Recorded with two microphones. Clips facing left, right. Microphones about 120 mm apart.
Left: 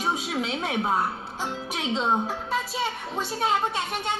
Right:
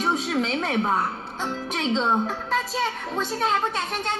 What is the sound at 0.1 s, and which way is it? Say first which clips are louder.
Speech: right 4 dB; 10° left (ahead or behind).